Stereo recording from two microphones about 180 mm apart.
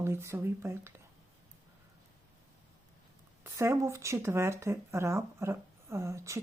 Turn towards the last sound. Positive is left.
turn(degrees=-15)  # may be behind; listen again after turning